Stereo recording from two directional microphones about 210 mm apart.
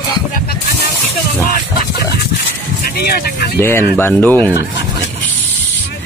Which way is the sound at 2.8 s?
50° left (ahead or behind).